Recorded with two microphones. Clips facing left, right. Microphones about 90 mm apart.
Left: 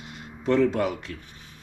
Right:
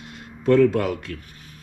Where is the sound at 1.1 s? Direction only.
65° right (ahead or behind).